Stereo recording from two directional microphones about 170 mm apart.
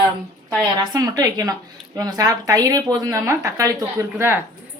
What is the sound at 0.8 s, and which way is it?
Speech, 20° right (ahead or behind).